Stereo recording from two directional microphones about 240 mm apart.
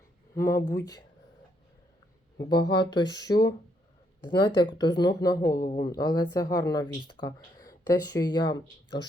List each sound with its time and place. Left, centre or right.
0.3 s speech: centre
2.4 s speech: centre